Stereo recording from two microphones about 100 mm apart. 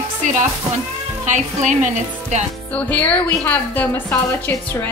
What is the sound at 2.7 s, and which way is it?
Music, 15° left (ahead or behind).